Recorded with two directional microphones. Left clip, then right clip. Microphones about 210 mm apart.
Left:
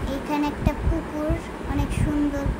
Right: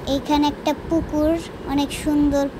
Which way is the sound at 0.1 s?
25° right (ahead or behind).